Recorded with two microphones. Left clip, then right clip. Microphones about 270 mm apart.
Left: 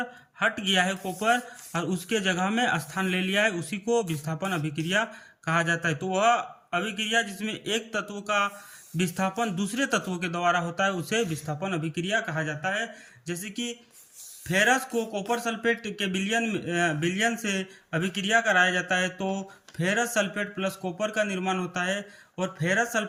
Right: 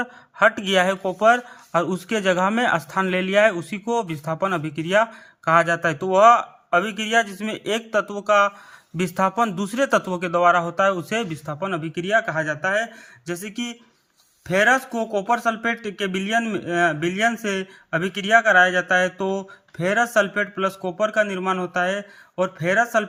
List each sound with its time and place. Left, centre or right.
0.0 s speech: centre